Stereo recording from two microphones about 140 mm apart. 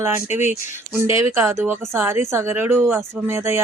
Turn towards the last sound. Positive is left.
turn(degrees=-20)  # may be behind; listen again after turning